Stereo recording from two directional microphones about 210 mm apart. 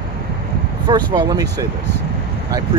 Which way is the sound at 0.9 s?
20° right (ahead or behind).